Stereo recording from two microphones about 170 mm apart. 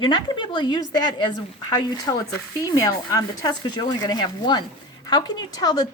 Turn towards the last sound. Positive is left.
turn(degrees=25)  # may be behind; listen again after turning